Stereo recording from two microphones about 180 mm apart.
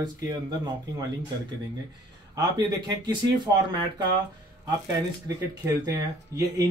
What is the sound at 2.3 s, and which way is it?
Speech, 25° right (ahead or behind).